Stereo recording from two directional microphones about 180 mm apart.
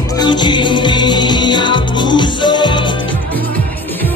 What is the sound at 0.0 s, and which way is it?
Music, 20° left (ahead or behind).